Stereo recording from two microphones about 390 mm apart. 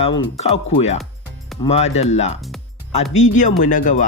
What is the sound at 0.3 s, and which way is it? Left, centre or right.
Speech, centre.